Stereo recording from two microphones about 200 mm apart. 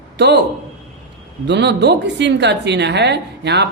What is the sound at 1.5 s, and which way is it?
A woman's voice, 60° right (ahead or behind).